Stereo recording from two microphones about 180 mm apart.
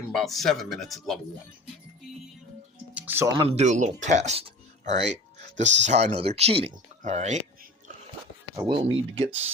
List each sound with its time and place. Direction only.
0.1 s speech: centre (ahead or behind)
2.9 s music: 10° right (ahead or behind)
3.3 s speech: 35° right (ahead or behind)
8.5 s speech: 25° right (ahead or behind)